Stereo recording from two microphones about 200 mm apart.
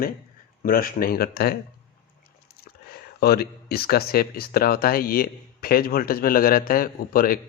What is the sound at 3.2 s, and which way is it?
Speech, 50° left (ahead or behind).